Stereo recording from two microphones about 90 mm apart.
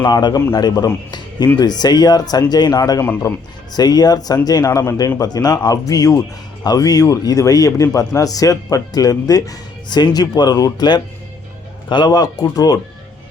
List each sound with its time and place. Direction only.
0.0 s a man's voice: 55° left (ahead or behind)